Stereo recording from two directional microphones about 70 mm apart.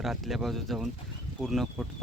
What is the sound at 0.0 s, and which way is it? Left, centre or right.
Speech, centre.